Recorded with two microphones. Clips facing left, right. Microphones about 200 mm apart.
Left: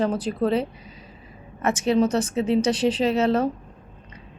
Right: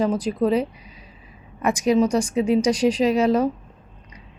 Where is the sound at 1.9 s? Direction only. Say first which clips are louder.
Right 2 dB; 10° right (ahead or behind).